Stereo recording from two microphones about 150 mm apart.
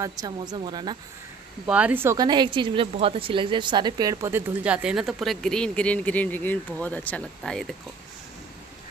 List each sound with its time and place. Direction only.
0.0 s speech: 25° right (ahead or behind)
1.7 s speech: 10° right (ahead or behind)
2.1 s a woman's voice: 30° right (ahead or behind); by 7.6 s 5° left (ahead or behind)